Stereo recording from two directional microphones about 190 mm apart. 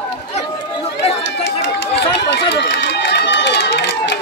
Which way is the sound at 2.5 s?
65° left (ahead or behind).